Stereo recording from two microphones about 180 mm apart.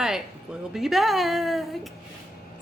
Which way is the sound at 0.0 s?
5° right (ahead or behind).